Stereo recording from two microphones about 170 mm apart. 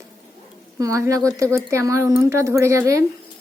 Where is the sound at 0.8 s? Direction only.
20° right (ahead or behind).